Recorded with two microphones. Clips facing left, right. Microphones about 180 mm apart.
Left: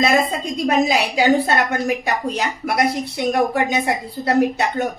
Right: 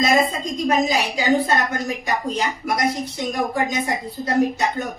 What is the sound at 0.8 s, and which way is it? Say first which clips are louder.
A woman's voice: left 3 dB; 65° left (ahead or behind).